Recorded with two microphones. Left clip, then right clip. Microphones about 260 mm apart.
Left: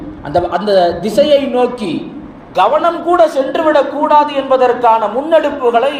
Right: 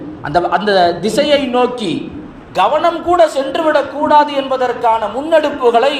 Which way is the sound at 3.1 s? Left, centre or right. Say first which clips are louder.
Left 2 dB; right.